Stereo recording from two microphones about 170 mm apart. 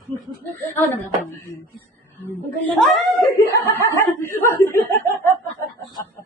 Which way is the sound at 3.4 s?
20° left (ahead or behind).